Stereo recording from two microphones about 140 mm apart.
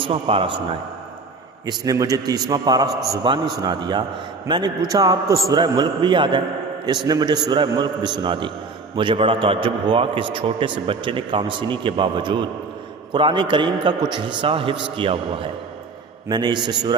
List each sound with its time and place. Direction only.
0.0 s a man's voice: 40° right (ahead or behind)
1.6 s a man's voice: 25° right (ahead or behind)